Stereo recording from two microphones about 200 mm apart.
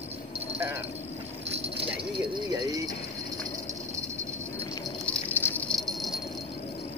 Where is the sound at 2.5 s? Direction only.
20° right (ahead or behind).